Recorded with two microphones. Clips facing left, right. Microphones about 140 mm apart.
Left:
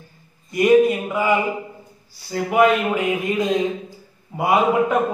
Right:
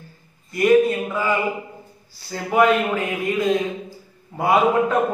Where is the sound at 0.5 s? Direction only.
20° left (ahead or behind).